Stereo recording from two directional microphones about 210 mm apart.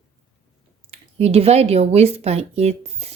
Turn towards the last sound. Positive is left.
turn(degrees=-30)  # may be behind; listen again after turning